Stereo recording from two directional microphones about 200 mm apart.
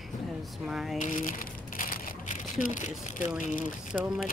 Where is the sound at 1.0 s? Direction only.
40° left (ahead or behind).